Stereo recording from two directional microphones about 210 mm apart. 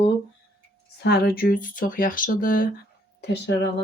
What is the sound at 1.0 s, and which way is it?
Speech, 50° left (ahead or behind).